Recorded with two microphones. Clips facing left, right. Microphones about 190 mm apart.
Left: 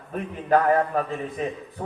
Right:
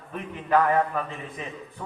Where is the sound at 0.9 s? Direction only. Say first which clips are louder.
Left 5 dB; 40° left (ahead or behind).